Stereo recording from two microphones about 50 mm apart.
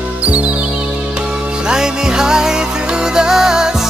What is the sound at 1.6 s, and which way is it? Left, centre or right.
Music, centre.